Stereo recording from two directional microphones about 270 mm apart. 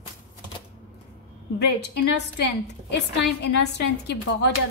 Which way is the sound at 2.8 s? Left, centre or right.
Left.